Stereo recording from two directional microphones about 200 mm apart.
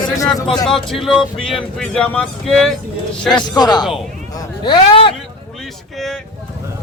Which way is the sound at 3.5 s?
20° left (ahead or behind).